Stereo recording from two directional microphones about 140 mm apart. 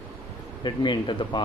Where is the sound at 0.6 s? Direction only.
35° left (ahead or behind).